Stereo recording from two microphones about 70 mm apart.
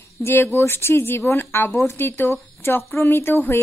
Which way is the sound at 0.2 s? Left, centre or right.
Left.